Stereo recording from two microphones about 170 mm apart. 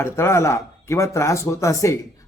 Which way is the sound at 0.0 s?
15° left (ahead or behind).